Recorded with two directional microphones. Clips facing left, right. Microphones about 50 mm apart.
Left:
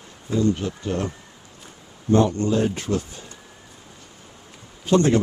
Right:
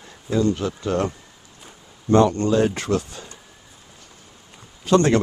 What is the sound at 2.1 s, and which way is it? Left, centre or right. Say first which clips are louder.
Speech: right 2 dB; right.